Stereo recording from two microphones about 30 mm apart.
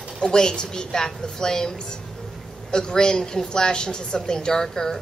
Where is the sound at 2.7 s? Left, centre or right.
Left.